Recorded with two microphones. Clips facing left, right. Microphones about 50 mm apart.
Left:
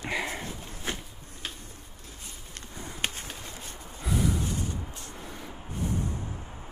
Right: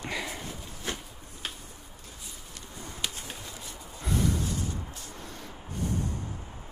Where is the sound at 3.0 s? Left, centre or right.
Left.